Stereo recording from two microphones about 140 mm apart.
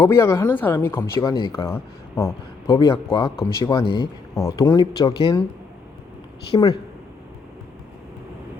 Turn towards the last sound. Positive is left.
turn(degrees=35)  # may be behind; listen again after turning